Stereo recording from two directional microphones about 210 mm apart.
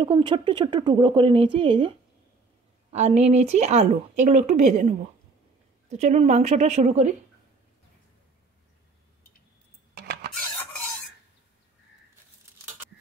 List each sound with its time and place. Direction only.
0.0 s speech: 20° right (ahead or behind)
10.0 s filing: 55° right (ahead or behind)